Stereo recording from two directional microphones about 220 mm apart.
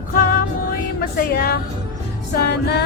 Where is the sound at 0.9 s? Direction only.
40° left (ahead or behind).